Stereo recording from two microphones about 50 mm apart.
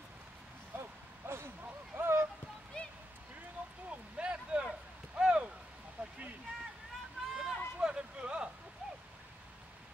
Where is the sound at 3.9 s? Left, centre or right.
Right.